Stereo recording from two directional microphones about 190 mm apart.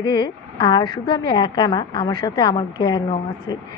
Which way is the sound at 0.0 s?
25° left (ahead or behind).